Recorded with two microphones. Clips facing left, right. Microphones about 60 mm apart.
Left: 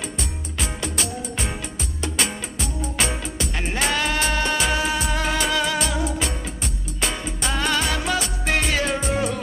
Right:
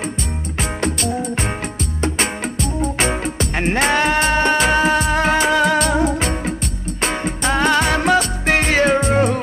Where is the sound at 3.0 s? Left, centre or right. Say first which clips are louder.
Right 2 dB; right.